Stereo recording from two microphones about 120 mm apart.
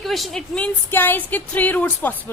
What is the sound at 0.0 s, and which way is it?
Speech, centre (ahead or behind).